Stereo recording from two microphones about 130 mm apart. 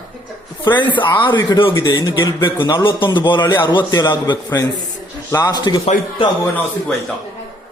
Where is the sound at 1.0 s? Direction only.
40° left (ahead or behind).